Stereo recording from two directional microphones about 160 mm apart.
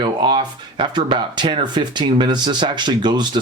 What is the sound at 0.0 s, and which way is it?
Speech, 30° right (ahead or behind).